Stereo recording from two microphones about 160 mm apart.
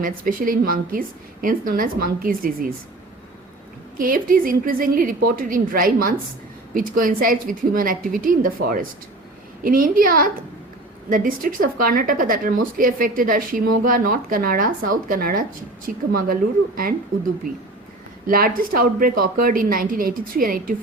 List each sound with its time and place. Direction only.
0.0 s a woman's voice: 60° right (ahead or behind)
3.9 s a woman's voice: 60° right (ahead or behind)
18.3 s a woman's voice: 65° right (ahead or behind)